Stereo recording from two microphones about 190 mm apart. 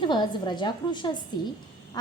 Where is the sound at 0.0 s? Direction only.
25° left (ahead or behind).